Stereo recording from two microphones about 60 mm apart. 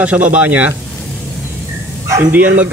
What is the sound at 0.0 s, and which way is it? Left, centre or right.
Speech, right.